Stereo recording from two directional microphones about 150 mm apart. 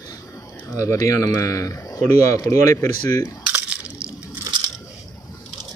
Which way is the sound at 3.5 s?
10° right (ahead or behind).